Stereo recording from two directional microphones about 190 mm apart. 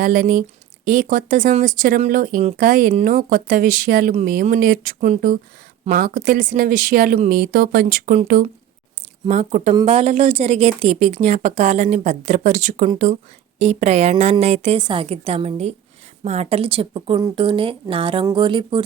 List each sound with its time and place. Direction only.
0.0 s speech: 45° right (ahead or behind)
9.3 s a woman's voice: 40° right (ahead or behind)